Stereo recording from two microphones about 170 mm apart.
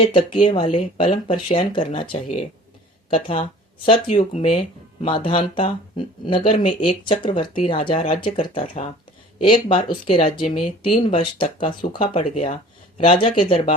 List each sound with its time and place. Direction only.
0.1 s speech: 30° left (ahead or behind)